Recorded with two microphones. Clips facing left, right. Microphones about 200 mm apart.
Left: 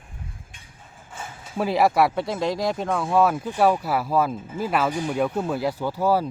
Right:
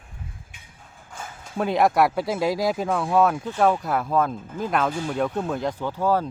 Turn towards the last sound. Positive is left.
turn(degrees=10)  # may be behind; listen again after turning